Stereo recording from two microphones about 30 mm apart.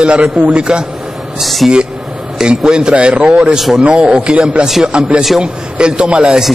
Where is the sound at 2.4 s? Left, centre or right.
Right.